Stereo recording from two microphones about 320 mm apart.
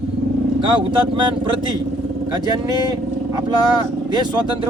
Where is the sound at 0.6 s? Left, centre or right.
Centre.